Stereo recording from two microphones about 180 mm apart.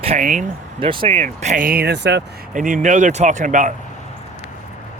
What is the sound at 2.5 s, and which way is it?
Speech, 45° right (ahead or behind).